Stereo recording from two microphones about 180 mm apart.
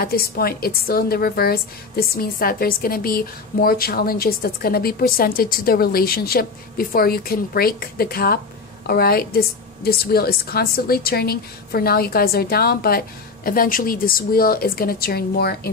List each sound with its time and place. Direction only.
0.0 s speech: 55° left (ahead or behind)